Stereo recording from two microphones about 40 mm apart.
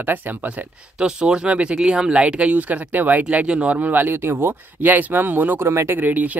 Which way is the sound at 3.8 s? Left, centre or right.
Right.